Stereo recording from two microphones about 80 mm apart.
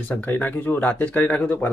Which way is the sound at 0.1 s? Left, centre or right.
Left.